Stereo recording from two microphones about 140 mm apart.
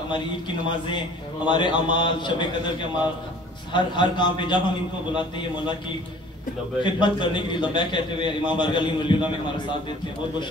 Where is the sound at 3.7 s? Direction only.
35° left (ahead or behind).